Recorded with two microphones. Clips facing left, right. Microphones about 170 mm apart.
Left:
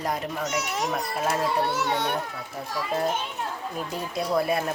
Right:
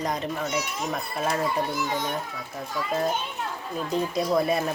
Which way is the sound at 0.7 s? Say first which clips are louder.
Left 2 dB; 75° left (ahead or behind).